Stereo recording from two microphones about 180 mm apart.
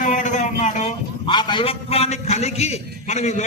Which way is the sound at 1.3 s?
25° left (ahead or behind).